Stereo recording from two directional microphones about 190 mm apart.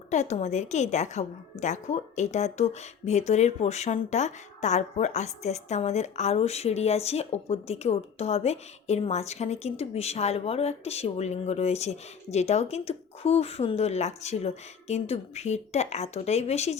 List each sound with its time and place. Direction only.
0.1 s speech: 35° left (ahead or behind)